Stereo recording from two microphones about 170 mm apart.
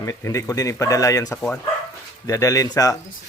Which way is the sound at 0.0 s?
20° left (ahead or behind).